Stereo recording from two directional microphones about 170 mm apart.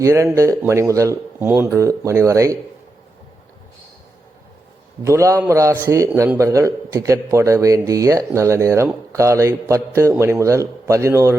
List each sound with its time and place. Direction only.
0.0 s a man's voice: 15° right (ahead or behind)
5.0 s a man's voice: 15° right (ahead or behind)